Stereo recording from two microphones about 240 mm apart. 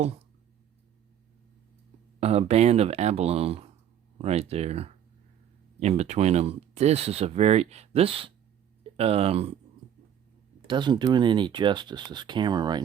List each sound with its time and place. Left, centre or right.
2.2 s speech: right
10.7 s speech: centre